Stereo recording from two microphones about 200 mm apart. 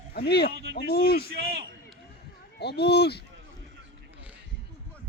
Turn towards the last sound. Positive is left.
turn(degrees=55)  # may be behind; listen again after turning